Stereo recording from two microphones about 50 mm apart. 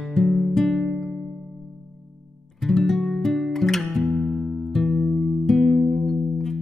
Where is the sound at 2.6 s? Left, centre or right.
Centre.